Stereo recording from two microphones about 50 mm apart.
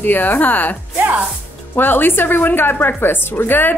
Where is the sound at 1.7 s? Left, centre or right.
Left.